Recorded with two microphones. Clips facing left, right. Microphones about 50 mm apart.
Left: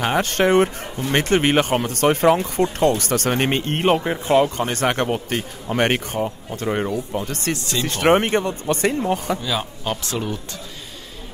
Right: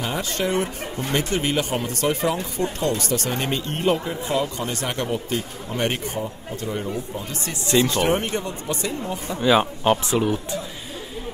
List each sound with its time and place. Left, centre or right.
0.0 s speech: left
9.4 s speech: right
10.1 s speech: centre